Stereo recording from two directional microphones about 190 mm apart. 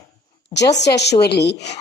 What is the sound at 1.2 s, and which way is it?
Speech, 60° left (ahead or behind).